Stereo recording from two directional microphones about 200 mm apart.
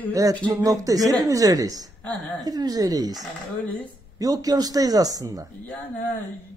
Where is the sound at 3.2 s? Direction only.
10° left (ahead or behind).